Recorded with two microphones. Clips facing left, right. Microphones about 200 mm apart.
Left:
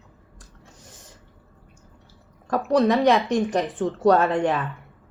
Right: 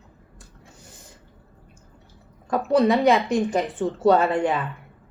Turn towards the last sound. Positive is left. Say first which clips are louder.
# even
turn(degrees=-5)  # may be behind; listen again after turning